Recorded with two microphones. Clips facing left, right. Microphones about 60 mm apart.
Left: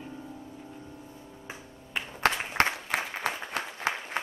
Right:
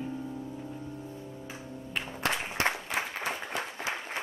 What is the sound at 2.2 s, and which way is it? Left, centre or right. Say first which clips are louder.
Applause: left 4 dB; left.